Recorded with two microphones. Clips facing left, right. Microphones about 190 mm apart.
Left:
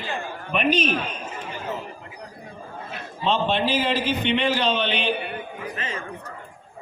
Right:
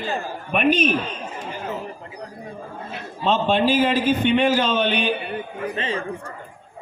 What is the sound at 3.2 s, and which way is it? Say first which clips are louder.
A man's voice: right 3 dB; 45° right (ahead or behind).